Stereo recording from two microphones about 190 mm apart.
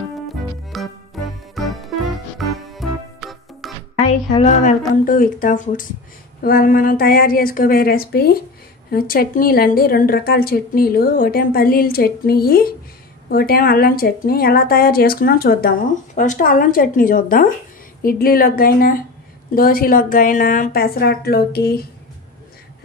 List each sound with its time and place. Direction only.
0.7 s music: centre (ahead or behind)
4.1 s a woman's voice: 35° left (ahead or behind); by 21.7 s 55° left (ahead or behind)